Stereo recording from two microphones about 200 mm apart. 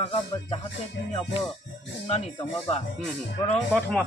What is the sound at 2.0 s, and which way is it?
Speech, 35° left (ahead or behind).